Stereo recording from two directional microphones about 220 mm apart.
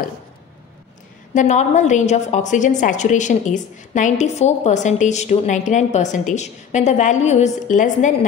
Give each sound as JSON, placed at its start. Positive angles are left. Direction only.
{"t": 1.3, "sound": "a woman's voice", "side_deg": 35}